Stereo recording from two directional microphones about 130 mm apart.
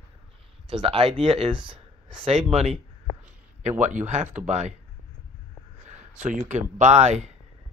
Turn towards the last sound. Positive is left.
turn(degrees=-60)  # may be behind; listen again after turning